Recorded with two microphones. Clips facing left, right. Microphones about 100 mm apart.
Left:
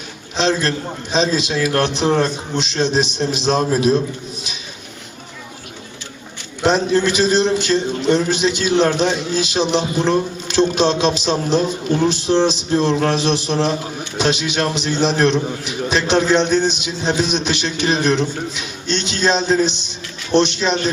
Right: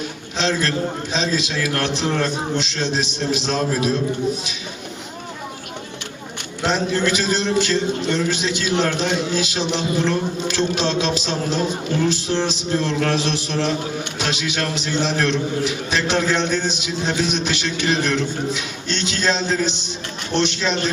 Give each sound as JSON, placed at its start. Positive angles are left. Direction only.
{"t": 0.3, "sound": "a man's voice", "side_deg": 20}
{"t": 6.6, "sound": "a man's voice", "side_deg": 20}